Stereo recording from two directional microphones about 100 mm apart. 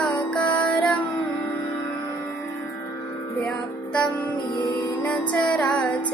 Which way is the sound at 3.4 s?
10° left (ahead or behind).